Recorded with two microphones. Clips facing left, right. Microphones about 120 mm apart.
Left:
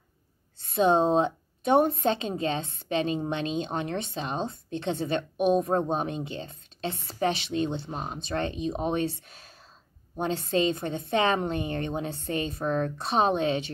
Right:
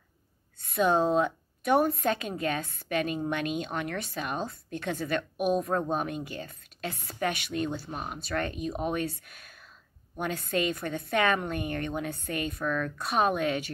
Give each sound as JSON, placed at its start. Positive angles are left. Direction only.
{"t": 0.6, "sound": "a woman's voice", "side_deg": 25}